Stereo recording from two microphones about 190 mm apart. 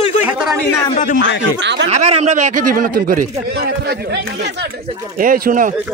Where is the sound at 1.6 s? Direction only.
70° right (ahead or behind).